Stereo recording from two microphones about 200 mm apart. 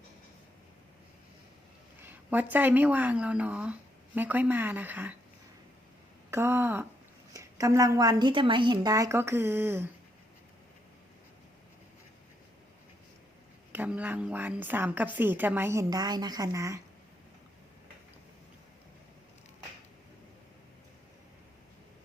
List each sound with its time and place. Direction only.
2.0 s speech: 10° right (ahead or behind)
6.3 s a woman's voice: 10° right (ahead or behind)
13.7 s a woman's voice: 5° right (ahead or behind)